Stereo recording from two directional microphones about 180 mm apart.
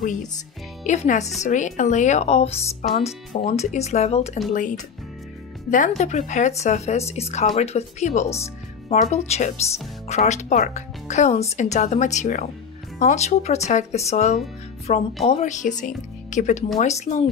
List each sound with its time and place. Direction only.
0.8 s speech: 40° left (ahead or behind)
5.7 s speech: 45° left (ahead or behind)